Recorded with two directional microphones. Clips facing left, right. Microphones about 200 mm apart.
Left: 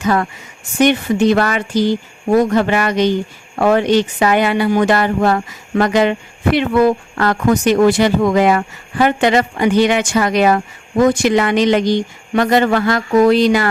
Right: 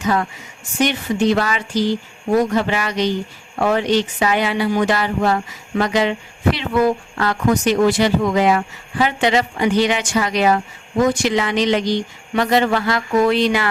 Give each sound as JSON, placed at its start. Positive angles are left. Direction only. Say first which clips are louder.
{"t": 0.8, "sound": "speech", "louder": "left 5 dB", "side_deg": 55}